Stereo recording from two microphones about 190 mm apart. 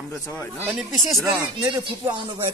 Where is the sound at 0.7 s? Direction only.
Centre (ahead or behind).